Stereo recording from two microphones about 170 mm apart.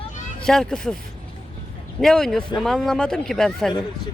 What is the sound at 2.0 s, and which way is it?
Speech, 5° left (ahead or behind).